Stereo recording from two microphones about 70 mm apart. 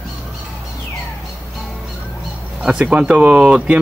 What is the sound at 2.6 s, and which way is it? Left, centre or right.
Speech, centre.